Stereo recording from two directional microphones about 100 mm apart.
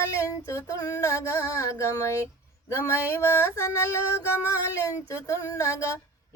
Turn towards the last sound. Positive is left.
turn(degrees=30)  # may be behind; listen again after turning